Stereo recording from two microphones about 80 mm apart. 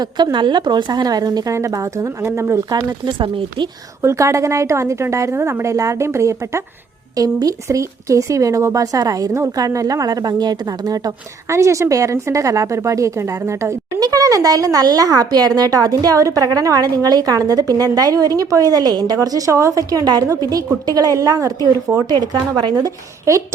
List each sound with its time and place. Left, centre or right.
0.0 s a woman's voice: right
1.5 s a woman's voice: right
2.6 s speech: right
4.0 s a woman's voice: right
7.2 s speech: right
11.4 s a woman's voice: right
22.1 s a woman's voice: right